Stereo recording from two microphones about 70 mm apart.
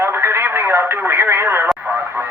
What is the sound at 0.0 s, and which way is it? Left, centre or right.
Radio, right.